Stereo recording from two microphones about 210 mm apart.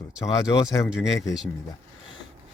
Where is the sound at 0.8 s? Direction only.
5° right (ahead or behind).